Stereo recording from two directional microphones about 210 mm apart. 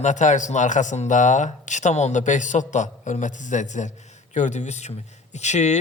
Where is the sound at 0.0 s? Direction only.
35° left (ahead or behind).